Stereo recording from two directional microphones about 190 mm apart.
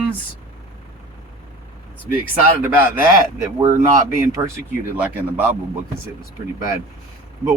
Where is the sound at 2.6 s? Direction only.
15° right (ahead or behind).